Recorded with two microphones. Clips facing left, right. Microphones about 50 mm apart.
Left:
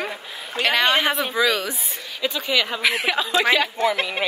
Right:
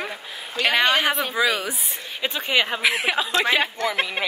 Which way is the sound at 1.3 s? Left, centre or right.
Centre.